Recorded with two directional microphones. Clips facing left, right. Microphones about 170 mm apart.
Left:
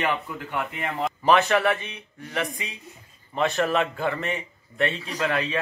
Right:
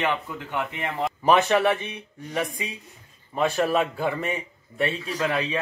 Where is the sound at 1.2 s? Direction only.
15° right (ahead or behind).